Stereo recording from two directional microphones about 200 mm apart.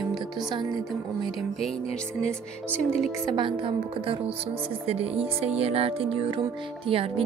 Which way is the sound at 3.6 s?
25° right (ahead or behind).